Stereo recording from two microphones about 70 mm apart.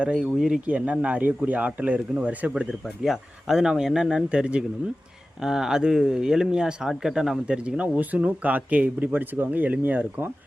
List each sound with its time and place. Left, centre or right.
0.0 s speech: centre
3.0 s speech: centre; by 10.2 s right